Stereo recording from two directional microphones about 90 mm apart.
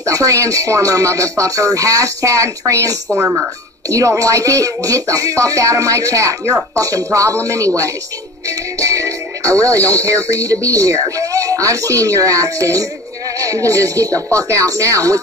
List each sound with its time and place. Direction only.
0.0 s speech: 35° right (ahead or behind)
3.2 s speech: 25° right (ahead or behind)
3.9 s speech: 35° right (ahead or behind)